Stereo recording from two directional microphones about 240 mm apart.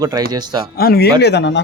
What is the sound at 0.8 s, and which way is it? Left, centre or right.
Speech, left.